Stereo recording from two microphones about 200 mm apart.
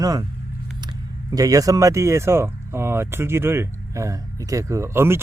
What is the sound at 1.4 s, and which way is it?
Speech, 15° right (ahead or behind).